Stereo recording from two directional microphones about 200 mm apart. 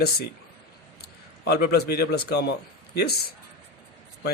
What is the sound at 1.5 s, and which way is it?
A man's voice, 55° left (ahead or behind).